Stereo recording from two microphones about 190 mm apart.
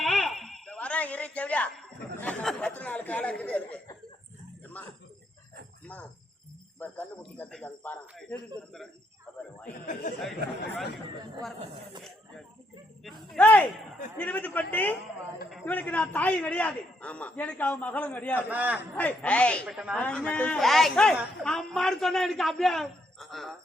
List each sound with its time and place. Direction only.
0.0 s a woman's voice: centre (ahead or behind)
5.8 s a man's voice: 10° left (ahead or behind)
9.8 s speech: 45° left (ahead or behind)
10.2 s a woman's voice: centre (ahead or behind)
11.6 s speech: 25° right (ahead or behind)
13.3 s a man's voice: 5° left (ahead or behind)
18.4 s a man's voice: 10° right (ahead or behind)
18.9 s a man's voice: 10° left (ahead or behind)
19.7 s a woman's voice: 5° right (ahead or behind)